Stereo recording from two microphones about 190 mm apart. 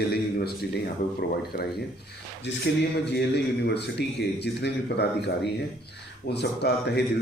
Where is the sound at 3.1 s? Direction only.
60° left (ahead or behind).